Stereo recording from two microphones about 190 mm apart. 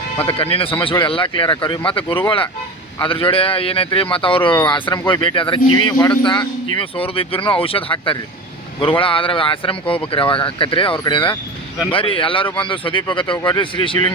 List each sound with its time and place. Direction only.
0.3 s speech: 30° left (ahead or behind)